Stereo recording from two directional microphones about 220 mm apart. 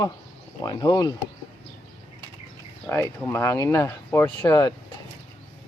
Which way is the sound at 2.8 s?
10° left (ahead or behind).